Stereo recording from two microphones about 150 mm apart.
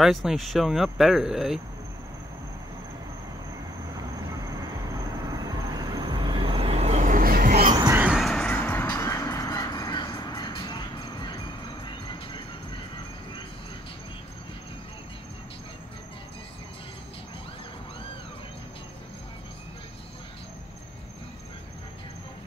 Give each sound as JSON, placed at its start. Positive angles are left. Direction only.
{"t": 0.0, "sound": "speech", "side_deg": 0}
{"t": 3.9, "sound": "vehicle", "side_deg": -25}
{"t": 8.0, "sound": "music", "side_deg": -5}
{"t": 11.8, "sound": "train", "side_deg": 30}